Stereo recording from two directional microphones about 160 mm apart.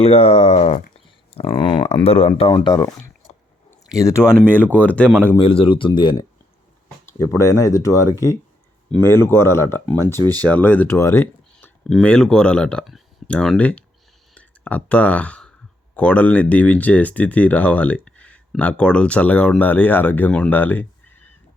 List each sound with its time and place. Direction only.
0.0 s speech: 40° left (ahead or behind)
3.9 s speech: 20° left (ahead or behind)
5.4 s speech: 35° left (ahead or behind)
7.0 s speech: 20° left (ahead or behind)
10.2 s speech: 25° right (ahead or behind)
10.4 s speech: 10° left (ahead or behind)